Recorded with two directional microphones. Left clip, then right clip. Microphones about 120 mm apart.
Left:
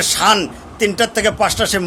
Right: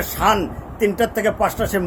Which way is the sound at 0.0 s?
25° left (ahead or behind).